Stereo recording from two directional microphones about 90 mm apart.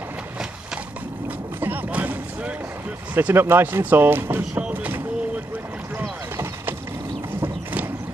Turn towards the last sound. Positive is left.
turn(degrees=-20)  # may be behind; listen again after turning